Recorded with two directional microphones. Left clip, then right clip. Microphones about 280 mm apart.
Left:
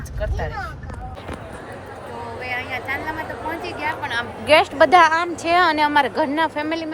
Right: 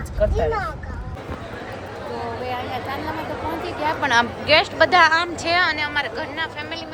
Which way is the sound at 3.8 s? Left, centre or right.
Centre.